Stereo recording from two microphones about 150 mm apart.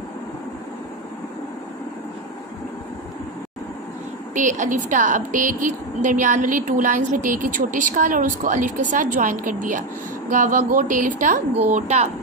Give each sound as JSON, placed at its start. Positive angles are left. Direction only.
{"t": 4.3, "sound": "a woman's voice", "side_deg": -55}
{"t": 11.7, "sound": "speech", "side_deg": -45}